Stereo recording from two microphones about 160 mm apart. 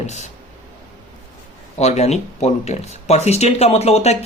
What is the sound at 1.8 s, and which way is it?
A man's voice, 45° left (ahead or behind).